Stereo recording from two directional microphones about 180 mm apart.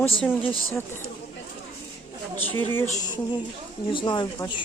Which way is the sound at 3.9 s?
25° left (ahead or behind).